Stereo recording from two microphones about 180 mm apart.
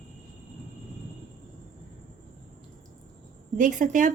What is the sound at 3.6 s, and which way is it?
Speech, 45° right (ahead or behind).